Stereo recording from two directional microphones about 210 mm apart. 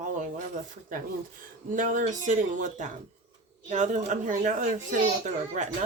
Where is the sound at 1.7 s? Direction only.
40° right (ahead or behind).